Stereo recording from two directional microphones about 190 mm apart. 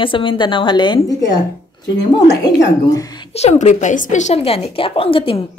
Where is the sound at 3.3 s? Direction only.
35° left (ahead or behind).